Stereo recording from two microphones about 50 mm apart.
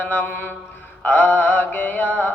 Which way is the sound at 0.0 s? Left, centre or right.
Left.